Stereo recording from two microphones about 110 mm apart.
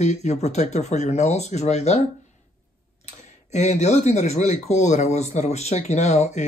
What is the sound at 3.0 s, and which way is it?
Speech, 90° left.